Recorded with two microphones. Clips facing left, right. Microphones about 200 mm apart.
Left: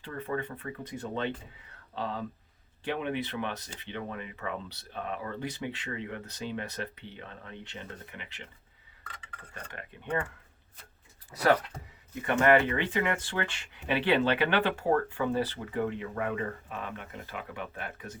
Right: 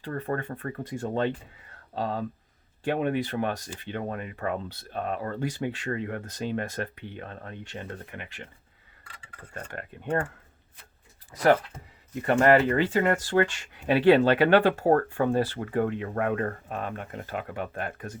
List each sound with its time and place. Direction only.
0.0 s speech: 45° right (ahead or behind)
9.7 s speech: 45° right (ahead or behind)
12.2 s speech: 35° right (ahead or behind)